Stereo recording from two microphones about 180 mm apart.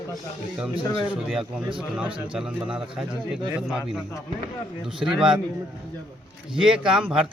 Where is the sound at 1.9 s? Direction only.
5° right (ahead or behind).